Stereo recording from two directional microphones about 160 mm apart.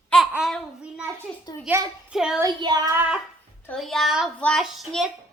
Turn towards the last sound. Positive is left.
turn(degrees=0)  # may be behind; listen again after turning